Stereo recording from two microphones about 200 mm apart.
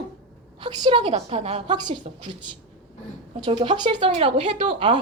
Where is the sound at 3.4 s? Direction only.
25° right (ahead or behind).